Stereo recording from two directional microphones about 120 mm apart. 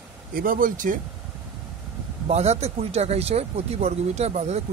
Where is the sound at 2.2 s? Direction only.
65° right (ahead or behind).